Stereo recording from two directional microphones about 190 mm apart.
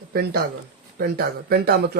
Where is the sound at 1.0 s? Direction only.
55° right (ahead or behind).